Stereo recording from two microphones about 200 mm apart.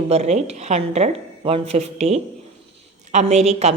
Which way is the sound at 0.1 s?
35° right (ahead or behind).